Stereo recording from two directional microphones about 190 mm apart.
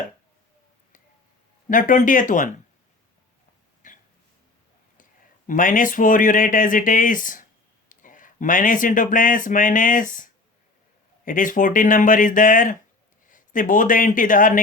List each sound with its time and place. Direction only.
1.7 s speech: 45° left (ahead or behind)
3.8 s throat clearing: 40° left (ahead or behind)
5.5 s speech: 45° left (ahead or behind)
11.3 s a man's voice: 45° left (ahead or behind)